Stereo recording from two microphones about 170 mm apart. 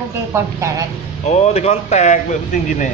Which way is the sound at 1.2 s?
40° left (ahead or behind).